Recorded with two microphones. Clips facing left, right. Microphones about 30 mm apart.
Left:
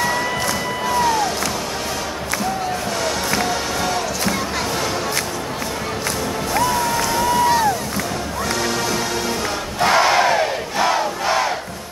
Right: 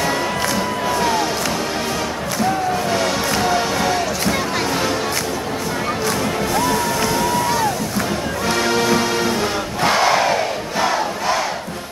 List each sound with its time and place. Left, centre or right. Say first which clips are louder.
0.8 s music: left 2 dB; centre
3.5 s music: right 3 dB; centre
6.6 s music: left 2 dB; centre
8.5 s music: right 5 dB; centre
9.8 s crowd: left 1 dB; centre